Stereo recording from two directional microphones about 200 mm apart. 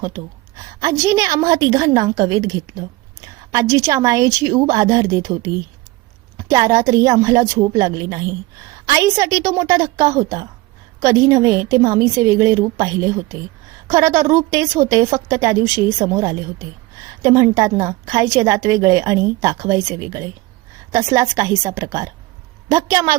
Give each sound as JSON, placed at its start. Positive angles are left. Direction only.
{"t": 0.8, "sound": "a woman's voice", "side_deg": -15}